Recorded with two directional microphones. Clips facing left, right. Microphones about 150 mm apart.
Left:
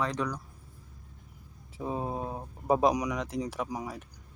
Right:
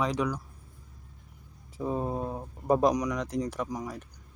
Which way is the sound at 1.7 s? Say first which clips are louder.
Right 3 dB; 5° left (ahead or behind).